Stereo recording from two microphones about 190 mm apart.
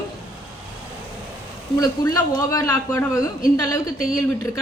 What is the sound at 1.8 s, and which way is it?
A woman's voice, 20° left (ahead or behind).